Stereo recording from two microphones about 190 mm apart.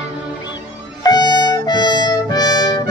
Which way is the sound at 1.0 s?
20° left (ahead or behind).